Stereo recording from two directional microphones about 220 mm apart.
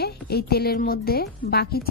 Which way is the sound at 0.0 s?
45° left (ahead or behind).